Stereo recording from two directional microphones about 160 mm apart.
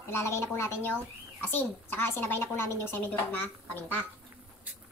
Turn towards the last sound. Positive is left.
turn(degrees=10)  # may be behind; listen again after turning